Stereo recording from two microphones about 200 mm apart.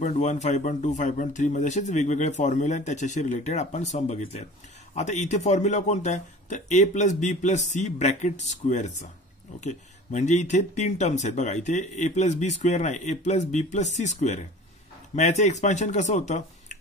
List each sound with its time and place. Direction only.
0.0 s speech: 35° left (ahead or behind)